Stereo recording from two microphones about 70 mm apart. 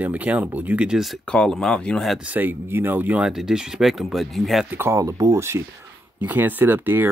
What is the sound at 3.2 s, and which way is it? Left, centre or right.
Speech, centre.